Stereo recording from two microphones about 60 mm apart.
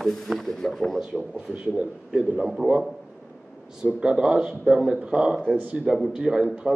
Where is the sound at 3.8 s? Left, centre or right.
Centre.